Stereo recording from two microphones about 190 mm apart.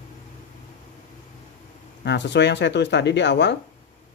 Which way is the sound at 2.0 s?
65° left (ahead or behind).